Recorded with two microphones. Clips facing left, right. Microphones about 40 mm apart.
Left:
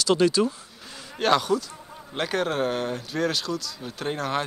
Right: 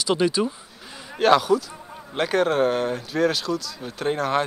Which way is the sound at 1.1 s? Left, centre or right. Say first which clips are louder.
Right 4 dB; centre.